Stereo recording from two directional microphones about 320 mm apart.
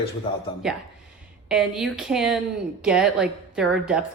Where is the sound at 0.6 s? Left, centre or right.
Centre.